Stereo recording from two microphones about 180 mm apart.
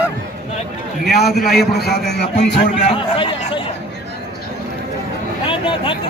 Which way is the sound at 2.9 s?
30° left (ahead or behind).